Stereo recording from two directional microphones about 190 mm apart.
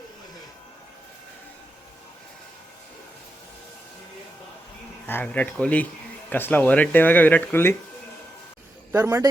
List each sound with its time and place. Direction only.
5.0 s speech: 10° left (ahead or behind)
8.9 s a man's voice: 15° right (ahead or behind)